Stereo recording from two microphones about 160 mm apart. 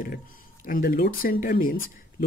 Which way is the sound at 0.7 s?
65° left (ahead or behind).